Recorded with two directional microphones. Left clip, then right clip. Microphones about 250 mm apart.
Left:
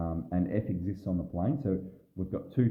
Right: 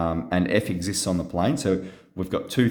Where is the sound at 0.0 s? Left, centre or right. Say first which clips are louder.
Right 10 dB; centre.